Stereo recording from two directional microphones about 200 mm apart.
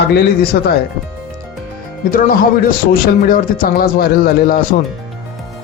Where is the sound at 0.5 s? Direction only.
55° left (ahead or behind).